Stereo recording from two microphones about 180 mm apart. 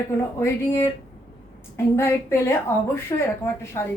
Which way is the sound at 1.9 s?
15° left (ahead or behind).